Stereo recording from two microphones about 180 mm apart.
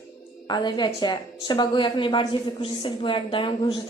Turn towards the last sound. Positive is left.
turn(degrees=25)  # may be behind; listen again after turning